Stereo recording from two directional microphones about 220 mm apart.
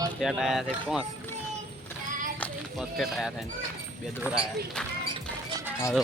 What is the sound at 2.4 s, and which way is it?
Speech, centre (ahead or behind).